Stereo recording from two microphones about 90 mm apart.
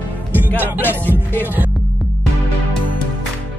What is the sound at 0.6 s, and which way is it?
Music, 20° right (ahead or behind).